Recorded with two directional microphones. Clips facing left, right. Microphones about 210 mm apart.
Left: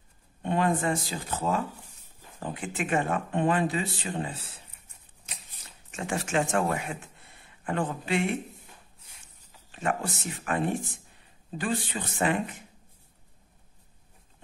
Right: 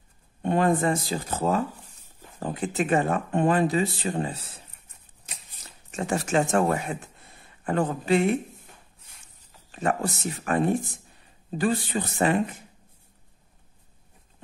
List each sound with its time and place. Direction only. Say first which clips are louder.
0.4 s speech: right 4 dB; 45° right (ahead or behind)
5.9 s speech: right 5 dB; 40° right (ahead or behind)
9.7 s speech: right 4 dB; 40° right (ahead or behind)